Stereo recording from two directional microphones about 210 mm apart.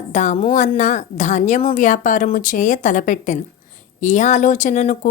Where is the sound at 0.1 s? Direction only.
35° left (ahead or behind).